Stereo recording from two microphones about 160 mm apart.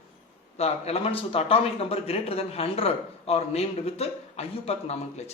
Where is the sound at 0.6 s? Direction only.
40° left (ahead or behind).